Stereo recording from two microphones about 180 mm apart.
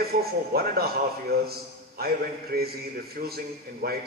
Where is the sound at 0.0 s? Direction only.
60° right (ahead or behind).